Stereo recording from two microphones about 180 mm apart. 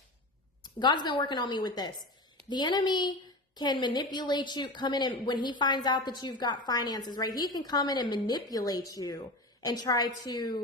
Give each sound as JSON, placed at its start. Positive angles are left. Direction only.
{"t": 0.6, "sound": "a woman's voice", "side_deg": 25}